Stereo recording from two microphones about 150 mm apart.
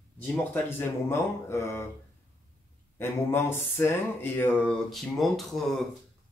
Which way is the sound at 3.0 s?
15° left (ahead or behind).